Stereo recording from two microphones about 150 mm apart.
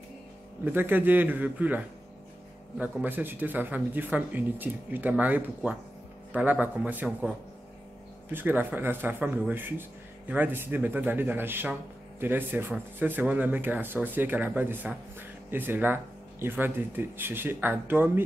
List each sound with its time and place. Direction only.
0.7 s speech: 15° right (ahead or behind)